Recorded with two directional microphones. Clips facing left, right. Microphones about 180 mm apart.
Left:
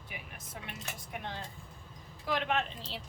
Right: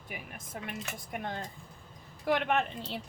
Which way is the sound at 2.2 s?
55° right (ahead or behind).